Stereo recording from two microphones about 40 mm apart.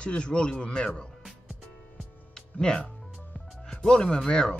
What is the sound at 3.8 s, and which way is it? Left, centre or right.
Speech, centre.